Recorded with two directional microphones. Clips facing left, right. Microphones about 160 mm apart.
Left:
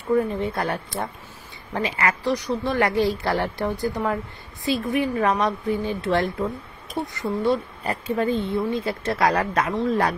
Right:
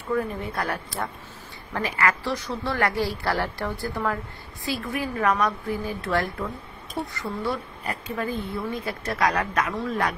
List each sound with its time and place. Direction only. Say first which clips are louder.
0.1 s speech: left 5 dB; 20° left (ahead or behind)